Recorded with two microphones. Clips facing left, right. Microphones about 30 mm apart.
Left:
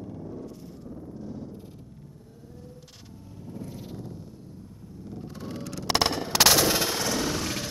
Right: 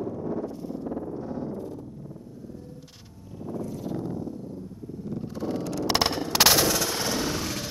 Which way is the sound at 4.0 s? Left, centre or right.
Centre.